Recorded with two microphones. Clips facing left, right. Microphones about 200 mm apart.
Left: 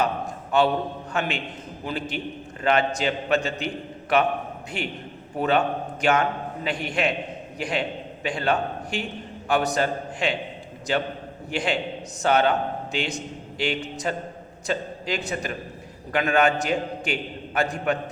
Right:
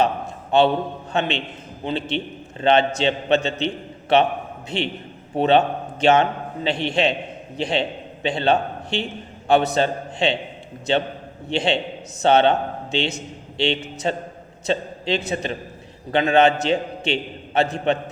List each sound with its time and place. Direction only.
0.5 s a man's voice: 25° right (ahead or behind)